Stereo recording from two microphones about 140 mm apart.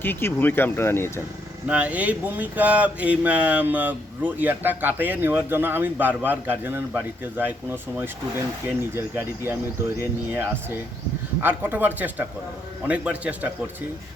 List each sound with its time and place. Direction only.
0.0 s speech: 15° left (ahead or behind)
1.6 s speech: 10° right (ahead or behind)